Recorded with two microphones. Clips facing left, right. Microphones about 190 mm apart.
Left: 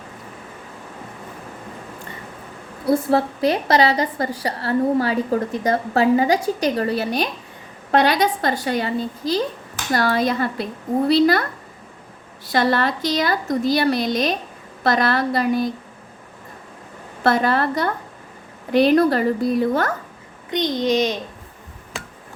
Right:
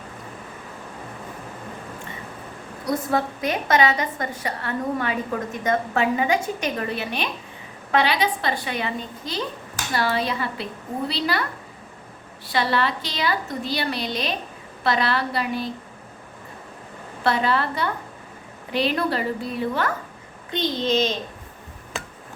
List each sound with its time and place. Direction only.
2.8 s a woman's voice: 30° left (ahead or behind)
12.5 s speech: 45° left (ahead or behind)
17.2 s speech: 45° left (ahead or behind)
20.5 s a child's voice: 15° left (ahead or behind)